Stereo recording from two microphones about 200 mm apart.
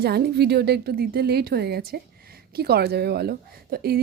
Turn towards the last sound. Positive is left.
turn(degrees=-50)  # may be behind; listen again after turning